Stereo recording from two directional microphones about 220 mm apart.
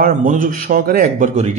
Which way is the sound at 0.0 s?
35° right (ahead or behind).